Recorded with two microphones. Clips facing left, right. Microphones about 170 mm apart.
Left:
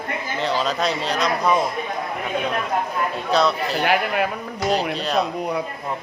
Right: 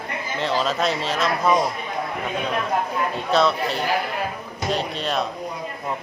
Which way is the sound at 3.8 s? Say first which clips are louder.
Left 7 dB; 70° left (ahead or behind).